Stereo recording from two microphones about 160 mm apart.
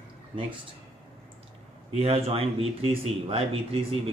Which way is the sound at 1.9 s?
40° right (ahead or behind).